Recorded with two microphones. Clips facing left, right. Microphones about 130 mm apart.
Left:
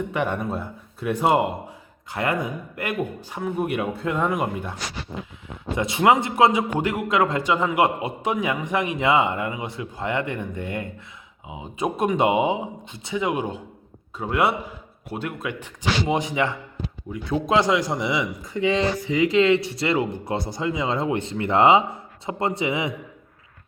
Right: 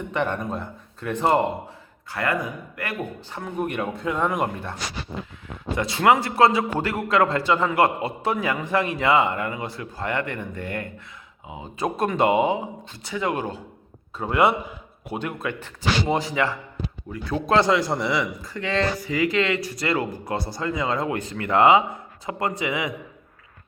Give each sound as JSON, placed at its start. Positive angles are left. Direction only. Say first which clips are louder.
{"t": 0.1, "sound": "speech", "louder": "left 1 dB", "side_deg": 10}
{"t": 2.1, "sound": "a man's voice", "louder": "left 1 dB", "side_deg": 20}
{"t": 3.2, "sound": "speech", "louder": "left 2 dB", "side_deg": 10}
{"t": 5.7, "sound": "a man's voice", "louder": "left 1 dB", "side_deg": 20}
{"t": 14.2, "sound": "a man's voice", "louder": "right 2 dB", "side_deg": 5}